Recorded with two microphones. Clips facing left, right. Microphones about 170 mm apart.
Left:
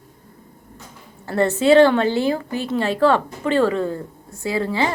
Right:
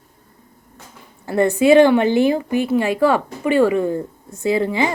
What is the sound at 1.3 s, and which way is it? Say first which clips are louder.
A woman's voice: right 2 dB; 15° right (ahead or behind).